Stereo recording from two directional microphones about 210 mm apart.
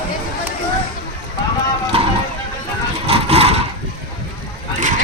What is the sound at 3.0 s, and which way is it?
Vehicle, 30° right (ahead or behind).